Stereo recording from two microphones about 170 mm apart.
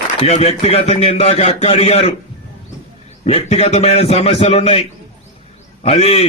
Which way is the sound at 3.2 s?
35° left (ahead or behind).